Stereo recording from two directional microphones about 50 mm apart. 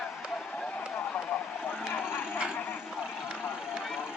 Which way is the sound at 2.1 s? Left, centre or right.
Left.